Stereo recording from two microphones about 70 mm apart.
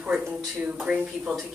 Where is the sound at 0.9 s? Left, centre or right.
Centre.